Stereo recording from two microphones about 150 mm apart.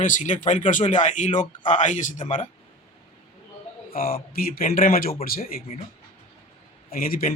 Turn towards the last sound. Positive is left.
turn(degrees=70)  # may be behind; listen again after turning